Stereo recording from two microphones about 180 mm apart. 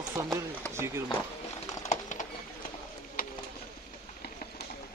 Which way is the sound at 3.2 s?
50° left (ahead or behind).